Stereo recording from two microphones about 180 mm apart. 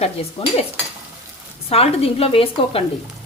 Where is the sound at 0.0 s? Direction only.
35° left (ahead or behind).